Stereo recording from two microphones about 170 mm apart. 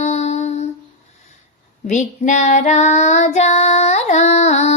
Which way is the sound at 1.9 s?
45° left (ahead or behind).